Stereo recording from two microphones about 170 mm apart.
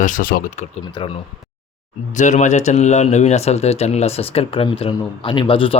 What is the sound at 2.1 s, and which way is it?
Speech, 45° left (ahead or behind).